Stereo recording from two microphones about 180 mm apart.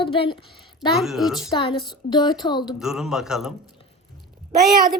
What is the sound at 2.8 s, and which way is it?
Speech, centre (ahead or behind).